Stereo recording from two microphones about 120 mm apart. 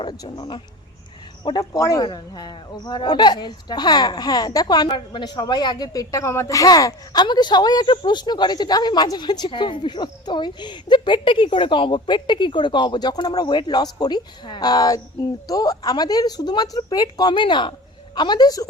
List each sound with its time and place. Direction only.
0.0 s speech: 35° left (ahead or behind)
2.0 s speech: 40° left (ahead or behind)